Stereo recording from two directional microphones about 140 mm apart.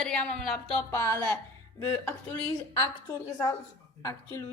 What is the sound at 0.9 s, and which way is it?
Speech, 20° left (ahead or behind).